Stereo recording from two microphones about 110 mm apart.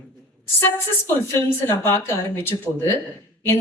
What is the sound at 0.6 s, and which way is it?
A woman's voice, 20° left (ahead or behind).